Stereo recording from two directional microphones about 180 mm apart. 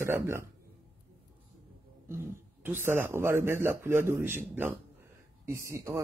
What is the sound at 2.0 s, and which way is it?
Speech, 15° right (ahead or behind).